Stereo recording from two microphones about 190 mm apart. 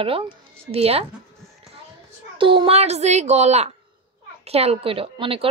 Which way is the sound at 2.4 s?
25° right (ahead or behind).